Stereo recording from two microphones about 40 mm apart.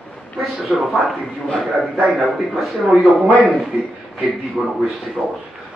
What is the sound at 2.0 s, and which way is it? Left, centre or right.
Speech, centre.